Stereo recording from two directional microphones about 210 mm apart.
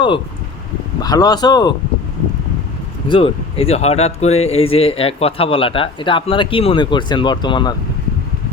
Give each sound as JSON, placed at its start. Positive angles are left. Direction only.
{"t": 1.0, "sound": "speech", "side_deg": 20}
{"t": 3.1, "sound": "speech", "side_deg": 25}